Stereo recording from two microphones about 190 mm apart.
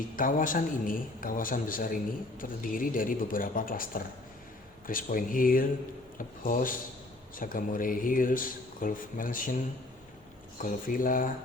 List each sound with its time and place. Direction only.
0.2 s speech: 45° left (ahead or behind)
10.6 s speech: 45° left (ahead or behind)